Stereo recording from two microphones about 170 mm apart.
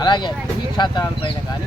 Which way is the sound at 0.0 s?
25° left (ahead or behind).